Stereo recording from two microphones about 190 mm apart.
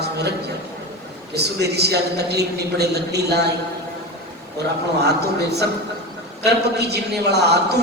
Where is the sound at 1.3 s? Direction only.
60° right (ahead or behind).